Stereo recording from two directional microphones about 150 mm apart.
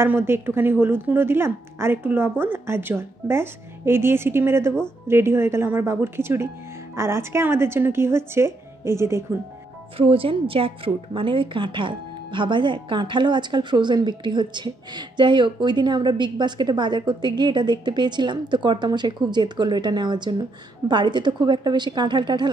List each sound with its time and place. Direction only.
0.0 s a woman's voice: 15° right (ahead or behind)
9.9 s a woman's voice: 40° right (ahead or behind)